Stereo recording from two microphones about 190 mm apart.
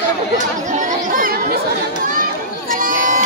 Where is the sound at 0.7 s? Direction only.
45° right (ahead or behind).